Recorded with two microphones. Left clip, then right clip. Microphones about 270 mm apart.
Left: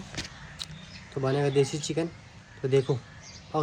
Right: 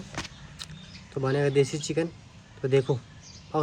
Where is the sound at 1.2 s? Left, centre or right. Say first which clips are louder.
Right 1 dB; centre.